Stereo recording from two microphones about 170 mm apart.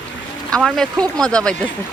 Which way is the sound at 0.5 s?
5° left (ahead or behind).